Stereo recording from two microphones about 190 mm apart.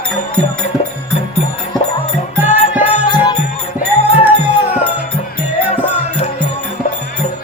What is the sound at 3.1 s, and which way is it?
Music, 20° left (ahead or behind).